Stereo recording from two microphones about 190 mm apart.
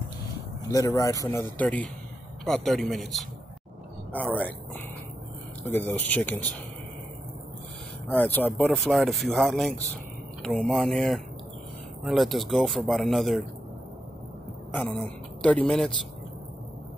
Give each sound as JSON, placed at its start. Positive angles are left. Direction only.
{"t": 0.3, "sound": "speech", "side_deg": 20}
{"t": 5.6, "sound": "speech", "side_deg": 10}
{"t": 8.1, "sound": "speech", "side_deg": 10}
{"t": 14.7, "sound": "speech", "side_deg": 5}